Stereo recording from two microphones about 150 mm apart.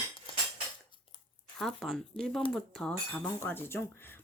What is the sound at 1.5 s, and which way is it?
Speech, centre (ahead or behind).